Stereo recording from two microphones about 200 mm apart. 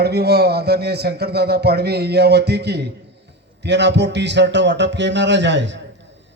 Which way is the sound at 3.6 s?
60° right (ahead or behind).